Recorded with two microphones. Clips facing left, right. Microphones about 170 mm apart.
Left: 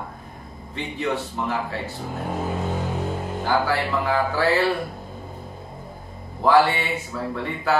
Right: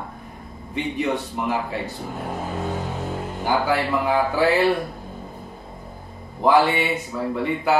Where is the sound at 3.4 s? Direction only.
15° right (ahead or behind).